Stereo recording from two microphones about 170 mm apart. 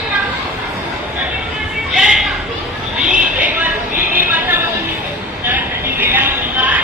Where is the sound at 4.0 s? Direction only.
55° right (ahead or behind).